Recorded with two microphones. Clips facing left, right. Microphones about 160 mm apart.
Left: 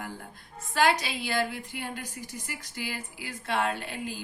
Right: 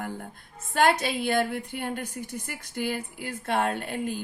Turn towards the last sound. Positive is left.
turn(degrees=-50)  # may be behind; listen again after turning